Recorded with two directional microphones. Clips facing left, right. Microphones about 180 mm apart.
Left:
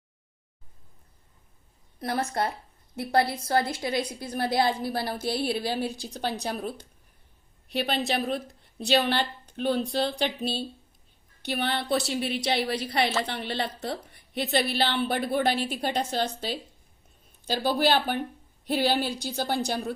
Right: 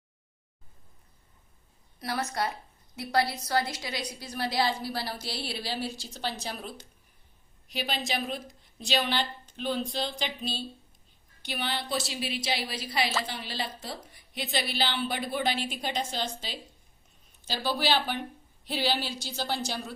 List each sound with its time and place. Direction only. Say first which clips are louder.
2.9 s a woman's voice: left 3 dB; 50° left (ahead or behind)
7.7 s a woman's voice: left 5 dB; 60° left (ahead or behind)
17.4 s a woman's voice: left 5 dB; 55° left (ahead or behind)